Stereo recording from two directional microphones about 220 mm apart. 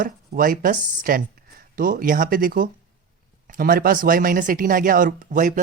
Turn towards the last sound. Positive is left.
turn(degrees=-35)  # may be behind; listen again after turning